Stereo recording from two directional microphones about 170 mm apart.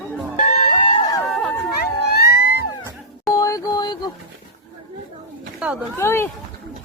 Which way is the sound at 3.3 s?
20° left (ahead or behind).